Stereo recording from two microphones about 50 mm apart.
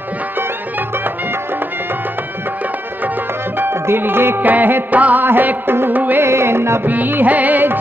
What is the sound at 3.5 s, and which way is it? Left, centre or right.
Music, right.